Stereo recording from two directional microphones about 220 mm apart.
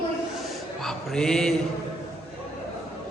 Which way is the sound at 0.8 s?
Centre (ahead or behind).